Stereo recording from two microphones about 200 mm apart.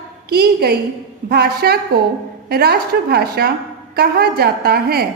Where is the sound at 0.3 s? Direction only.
50° right (ahead or behind).